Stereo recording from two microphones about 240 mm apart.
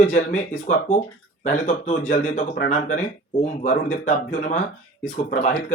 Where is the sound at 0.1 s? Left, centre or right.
Left.